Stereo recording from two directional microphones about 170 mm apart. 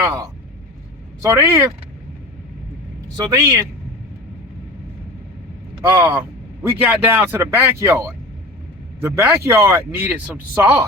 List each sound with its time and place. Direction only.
1.2 s speech: 15° right (ahead or behind)
3.2 s speech: 20° right (ahead or behind)
6.0 s speech: 10° right (ahead or behind)